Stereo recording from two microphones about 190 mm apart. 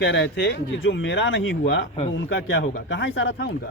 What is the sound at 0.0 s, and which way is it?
Speech, 70° left (ahead or behind).